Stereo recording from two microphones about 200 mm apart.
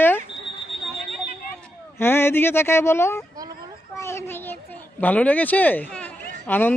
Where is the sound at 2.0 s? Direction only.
10° left (ahead or behind).